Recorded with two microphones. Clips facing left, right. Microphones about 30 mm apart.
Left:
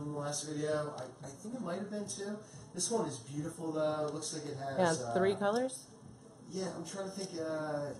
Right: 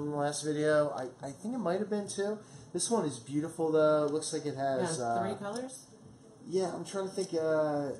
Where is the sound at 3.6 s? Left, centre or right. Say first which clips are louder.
Right 8 dB; right.